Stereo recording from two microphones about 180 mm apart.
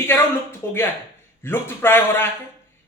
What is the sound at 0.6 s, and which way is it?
A man's voice, 15° left (ahead or behind).